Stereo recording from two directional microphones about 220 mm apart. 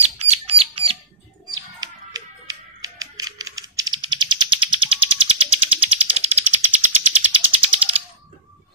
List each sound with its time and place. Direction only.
0.0 s bird: 30° right (ahead or behind)
1.8 s music: 15° right (ahead or behind)
6.4 s a sound: 90° right
7.1 s typewriter: 30° right (ahead or behind)